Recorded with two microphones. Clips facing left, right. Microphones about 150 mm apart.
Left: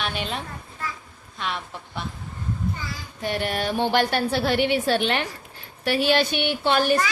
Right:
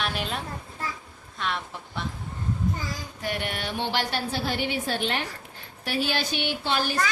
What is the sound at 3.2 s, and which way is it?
A woman's voice, 30° left (ahead or behind).